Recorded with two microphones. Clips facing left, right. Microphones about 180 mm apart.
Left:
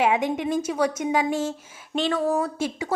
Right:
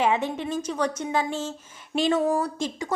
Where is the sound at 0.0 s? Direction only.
10° left (ahead or behind).